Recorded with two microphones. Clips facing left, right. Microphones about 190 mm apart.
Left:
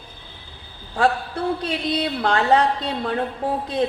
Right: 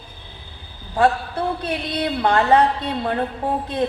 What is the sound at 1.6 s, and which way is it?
A woman's voice, 55° right (ahead or behind).